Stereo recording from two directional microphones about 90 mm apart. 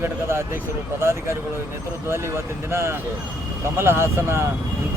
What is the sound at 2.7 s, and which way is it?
Speech, 30° right (ahead or behind).